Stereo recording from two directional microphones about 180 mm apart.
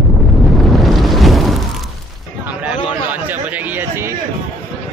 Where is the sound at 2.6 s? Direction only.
10° right (ahead or behind).